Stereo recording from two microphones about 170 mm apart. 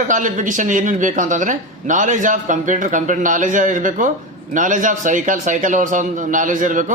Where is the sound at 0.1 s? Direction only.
50° right (ahead or behind).